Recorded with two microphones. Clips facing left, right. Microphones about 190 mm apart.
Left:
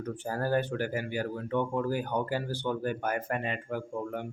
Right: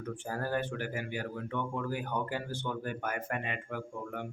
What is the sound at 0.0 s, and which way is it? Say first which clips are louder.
Speech: left 4 dB; 35° left (ahead or behind).